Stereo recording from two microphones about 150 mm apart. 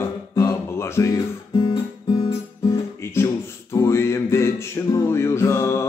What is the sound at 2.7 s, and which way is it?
Music, 20° left (ahead or behind).